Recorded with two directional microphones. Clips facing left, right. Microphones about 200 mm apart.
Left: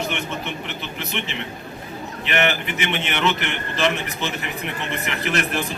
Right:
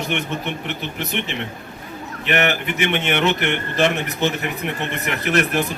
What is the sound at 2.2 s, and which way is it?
A man's voice, 50° right (ahead or behind).